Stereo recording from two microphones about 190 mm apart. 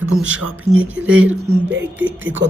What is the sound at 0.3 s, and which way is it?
Speech, 90° right.